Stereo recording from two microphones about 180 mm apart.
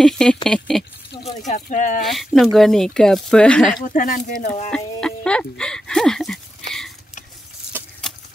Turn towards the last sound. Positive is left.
turn(degrees=-10)  # may be behind; listen again after turning